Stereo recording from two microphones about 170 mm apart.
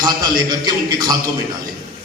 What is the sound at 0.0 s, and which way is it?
A man's voice, 25° right (ahead or behind).